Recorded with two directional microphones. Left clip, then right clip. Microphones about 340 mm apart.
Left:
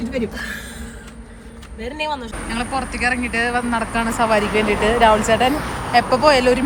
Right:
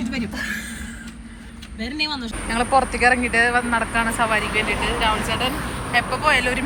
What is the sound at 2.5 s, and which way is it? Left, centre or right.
Speech, centre.